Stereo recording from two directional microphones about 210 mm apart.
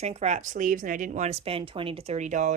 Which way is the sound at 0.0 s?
30° right (ahead or behind).